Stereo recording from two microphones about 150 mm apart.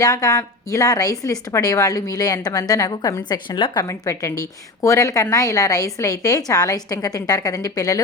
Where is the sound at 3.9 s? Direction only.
20° left (ahead or behind).